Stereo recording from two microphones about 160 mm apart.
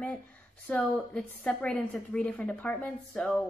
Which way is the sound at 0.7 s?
5° left (ahead or behind).